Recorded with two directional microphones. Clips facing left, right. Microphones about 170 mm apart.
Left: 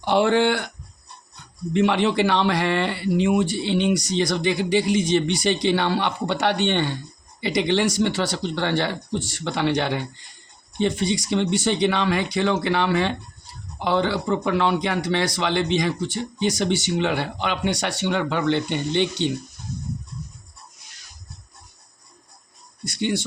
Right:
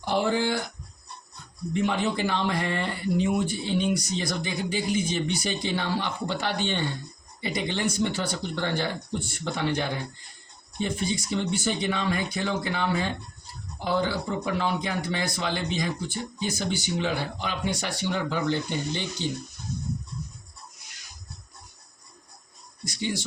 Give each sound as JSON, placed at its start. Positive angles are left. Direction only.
{"t": 0.0, "sound": "speech", "side_deg": 70}
{"t": 1.7, "sound": "speech", "side_deg": 85}
{"t": 10.8, "sound": "speech", "side_deg": 85}
{"t": 22.9, "sound": "speech", "side_deg": 60}